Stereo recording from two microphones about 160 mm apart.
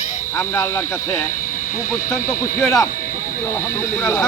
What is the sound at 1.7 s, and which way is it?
Speech, 55° left (ahead or behind).